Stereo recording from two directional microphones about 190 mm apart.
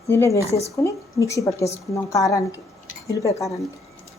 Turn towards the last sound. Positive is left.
turn(degrees=15)  # may be behind; listen again after turning